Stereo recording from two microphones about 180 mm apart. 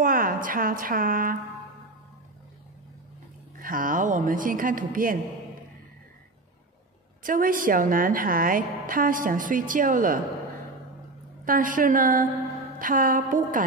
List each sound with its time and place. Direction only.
0.0 s a woman's voice: 50° right (ahead or behind)
3.6 s a woman's voice: 50° right (ahead or behind)
7.2 s a woman's voice: 50° right (ahead or behind)
11.4 s a woman's voice: 50° right (ahead or behind)